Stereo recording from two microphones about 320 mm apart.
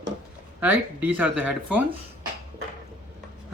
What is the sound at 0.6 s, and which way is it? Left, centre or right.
Speech, centre.